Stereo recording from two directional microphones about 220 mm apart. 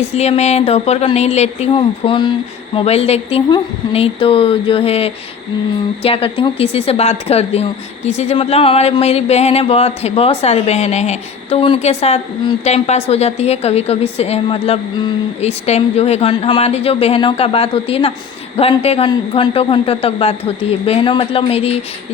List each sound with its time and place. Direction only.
0.0 s speech: 30° left (ahead or behind)